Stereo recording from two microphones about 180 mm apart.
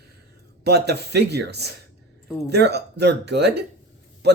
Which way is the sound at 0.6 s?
65° right (ahead or behind).